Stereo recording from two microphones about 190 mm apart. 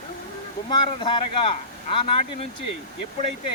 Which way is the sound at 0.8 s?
25° left (ahead or behind).